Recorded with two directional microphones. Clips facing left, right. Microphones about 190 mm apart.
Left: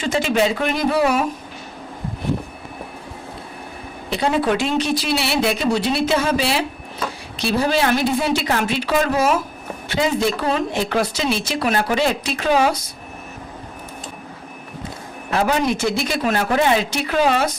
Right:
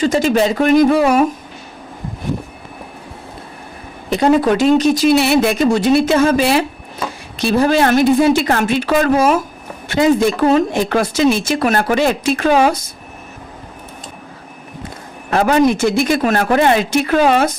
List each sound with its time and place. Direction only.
0.0 s speech: 40° right (ahead or behind)
4.1 s speech: 45° right (ahead or behind)
15.3 s speech: 55° right (ahead or behind)